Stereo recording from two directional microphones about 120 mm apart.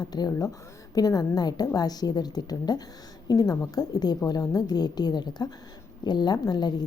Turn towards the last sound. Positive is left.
turn(degrees=35)  # may be behind; listen again after turning